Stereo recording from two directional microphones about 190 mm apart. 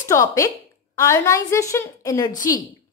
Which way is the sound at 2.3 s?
45° left (ahead or behind).